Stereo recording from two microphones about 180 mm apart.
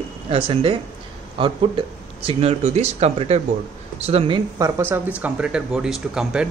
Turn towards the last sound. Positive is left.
turn(degrees=-5)  # may be behind; listen again after turning